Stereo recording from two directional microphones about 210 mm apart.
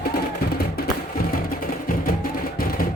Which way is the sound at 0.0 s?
45° left (ahead or behind).